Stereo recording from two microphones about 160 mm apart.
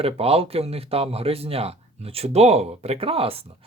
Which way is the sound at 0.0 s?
40° right (ahead or behind).